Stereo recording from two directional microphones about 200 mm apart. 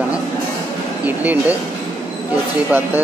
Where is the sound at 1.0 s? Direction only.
10° right (ahead or behind).